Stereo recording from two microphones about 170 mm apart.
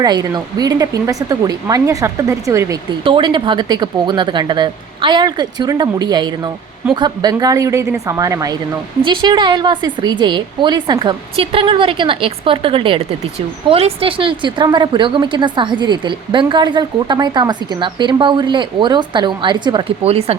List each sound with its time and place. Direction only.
0.0 s a woman's voice: 25° right (ahead or behind)
3.0 s a woman's voice: 30° right (ahead or behind)